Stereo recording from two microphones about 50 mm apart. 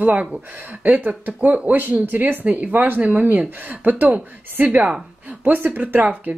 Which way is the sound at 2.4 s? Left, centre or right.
Right.